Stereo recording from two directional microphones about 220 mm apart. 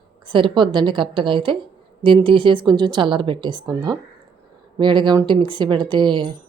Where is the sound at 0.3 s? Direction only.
20° right (ahead or behind).